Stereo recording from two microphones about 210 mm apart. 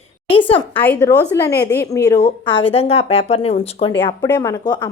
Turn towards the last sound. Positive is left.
turn(degrees=20)  # may be behind; listen again after turning